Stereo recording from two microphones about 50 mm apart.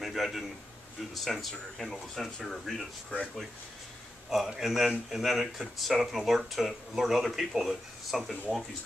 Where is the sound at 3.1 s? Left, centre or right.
Left.